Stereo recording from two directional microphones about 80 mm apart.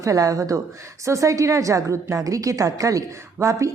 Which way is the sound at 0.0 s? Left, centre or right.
Right.